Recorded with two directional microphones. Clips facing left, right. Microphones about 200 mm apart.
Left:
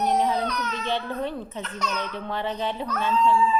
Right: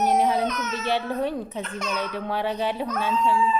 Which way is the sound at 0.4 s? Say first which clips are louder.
Right 2 dB; 20° right (ahead or behind).